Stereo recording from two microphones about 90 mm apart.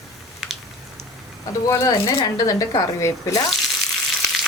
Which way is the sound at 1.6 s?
35° left (ahead or behind).